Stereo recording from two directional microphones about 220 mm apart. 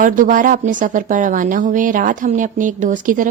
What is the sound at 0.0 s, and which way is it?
Speech, 35° right (ahead or behind).